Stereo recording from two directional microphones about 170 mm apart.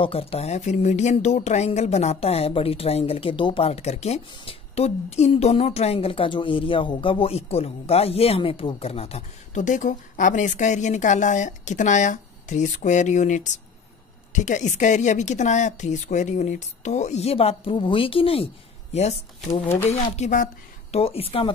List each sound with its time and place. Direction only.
0.0 s a woman's voice: 35° left (ahead or behind)